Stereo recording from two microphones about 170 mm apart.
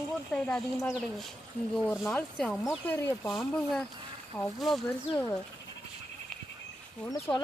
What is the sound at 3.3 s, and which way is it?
Speech, centre (ahead or behind).